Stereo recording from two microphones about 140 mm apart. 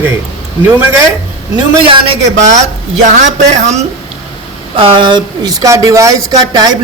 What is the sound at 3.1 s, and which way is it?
Speech, 55° right (ahead or behind).